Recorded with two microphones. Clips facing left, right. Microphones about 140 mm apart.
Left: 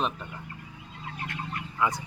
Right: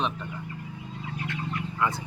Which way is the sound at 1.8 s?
15° left (ahead or behind).